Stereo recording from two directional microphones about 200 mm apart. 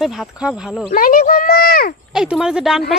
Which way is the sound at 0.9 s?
45° left (ahead or behind).